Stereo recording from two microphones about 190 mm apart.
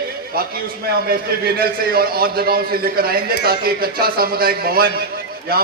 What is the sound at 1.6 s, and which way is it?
A man's voice, 55° right (ahead or behind).